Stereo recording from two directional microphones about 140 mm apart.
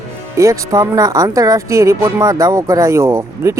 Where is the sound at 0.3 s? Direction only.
25° right (ahead or behind).